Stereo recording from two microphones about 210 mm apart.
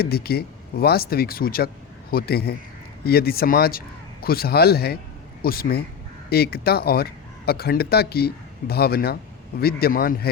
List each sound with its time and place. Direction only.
0.0 s speech: 45° left (ahead or behind)